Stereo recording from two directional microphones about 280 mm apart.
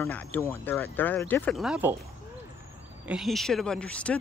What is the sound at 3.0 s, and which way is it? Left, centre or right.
Speech, centre.